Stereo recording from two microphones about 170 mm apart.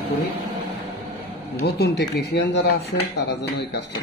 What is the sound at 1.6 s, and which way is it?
Speech, 75° left (ahead or behind).